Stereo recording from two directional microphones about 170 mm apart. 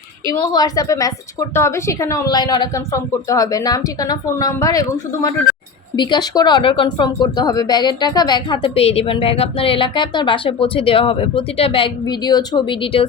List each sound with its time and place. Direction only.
0.5 s speech: 20° left (ahead or behind)